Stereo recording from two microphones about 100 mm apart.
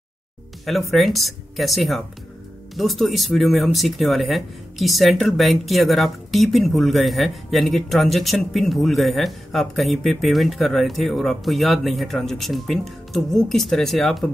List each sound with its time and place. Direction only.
0.7 s speech: centre (ahead or behind)